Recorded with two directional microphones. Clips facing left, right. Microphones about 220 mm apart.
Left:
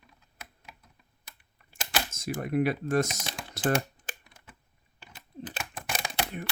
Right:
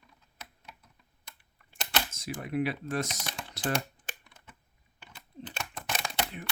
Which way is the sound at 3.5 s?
50° left (ahead or behind).